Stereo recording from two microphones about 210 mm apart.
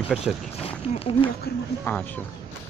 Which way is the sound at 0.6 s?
25° left (ahead or behind).